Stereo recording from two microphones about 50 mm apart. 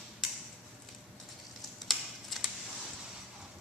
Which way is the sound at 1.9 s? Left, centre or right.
Centre.